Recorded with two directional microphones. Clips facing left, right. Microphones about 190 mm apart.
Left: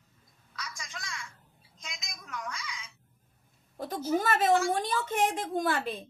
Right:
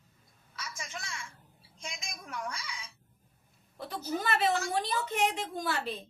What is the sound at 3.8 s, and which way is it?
A woman's voice, 45° left (ahead or behind).